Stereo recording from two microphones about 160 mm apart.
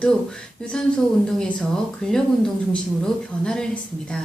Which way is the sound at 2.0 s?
5° left (ahead or behind).